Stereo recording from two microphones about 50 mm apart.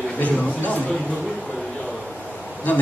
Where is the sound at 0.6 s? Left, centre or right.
Left.